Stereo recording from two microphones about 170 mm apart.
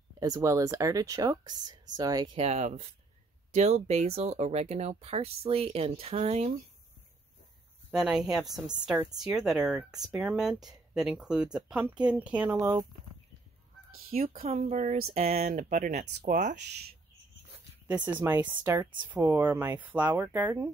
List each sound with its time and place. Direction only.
0.2 s speech: 20° right (ahead or behind)
2.3 s speech: 40° right (ahead or behind)
7.9 s speech: 5° right (ahead or behind)
13.9 s speech: 60° right (ahead or behind)
14.3 s speech: 40° right (ahead or behind)
17.8 s speech: 10° right (ahead or behind)
18.8 s speech: 30° right (ahead or behind)
19.0 s speech: 15° right (ahead or behind)